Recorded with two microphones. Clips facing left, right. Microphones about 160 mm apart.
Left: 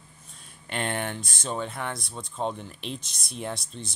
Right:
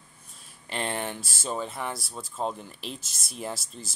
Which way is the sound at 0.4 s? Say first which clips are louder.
Left 1 dB; centre (ahead or behind).